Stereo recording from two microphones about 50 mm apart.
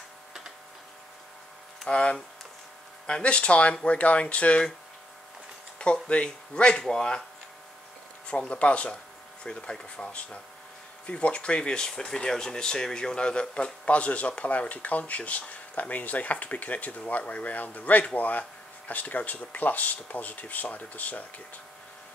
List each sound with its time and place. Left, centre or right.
1.9 s speech: left
6.0 s speech: left
8.3 s speech: left